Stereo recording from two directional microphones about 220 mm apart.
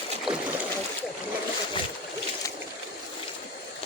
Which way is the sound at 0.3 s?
Centre (ahead or behind).